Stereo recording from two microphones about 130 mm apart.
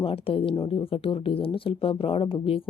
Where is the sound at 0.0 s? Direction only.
45° left (ahead or behind).